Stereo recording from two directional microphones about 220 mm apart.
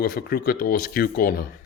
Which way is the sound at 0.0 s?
45° left (ahead or behind).